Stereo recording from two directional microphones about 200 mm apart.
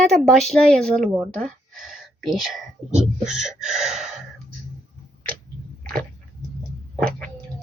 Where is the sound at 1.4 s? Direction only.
Centre (ahead or behind).